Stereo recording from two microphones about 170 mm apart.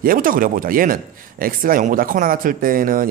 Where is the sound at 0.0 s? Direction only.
55° right (ahead or behind).